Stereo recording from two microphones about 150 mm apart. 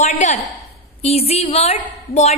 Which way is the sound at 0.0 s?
50° left (ahead or behind).